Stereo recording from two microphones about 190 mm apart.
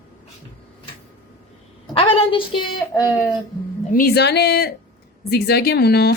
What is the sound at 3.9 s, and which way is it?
Speech, 55° left (ahead or behind).